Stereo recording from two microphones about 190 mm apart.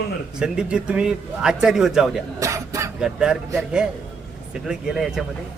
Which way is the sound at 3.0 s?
5° right (ahead or behind).